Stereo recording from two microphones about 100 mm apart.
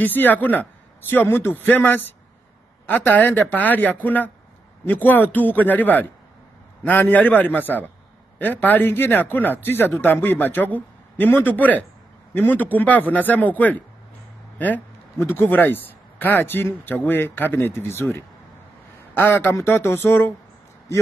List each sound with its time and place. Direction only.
0.0 s speech: 20° left (ahead or behind)